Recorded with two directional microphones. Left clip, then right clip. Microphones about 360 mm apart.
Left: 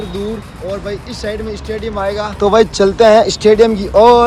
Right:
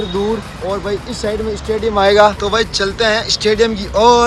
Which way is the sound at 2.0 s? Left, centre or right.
Right.